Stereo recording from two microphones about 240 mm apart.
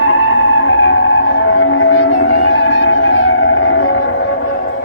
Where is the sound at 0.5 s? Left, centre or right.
Left.